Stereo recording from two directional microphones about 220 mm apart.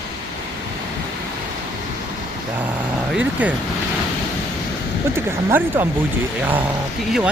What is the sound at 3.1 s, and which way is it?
Speech, 5° right (ahead or behind).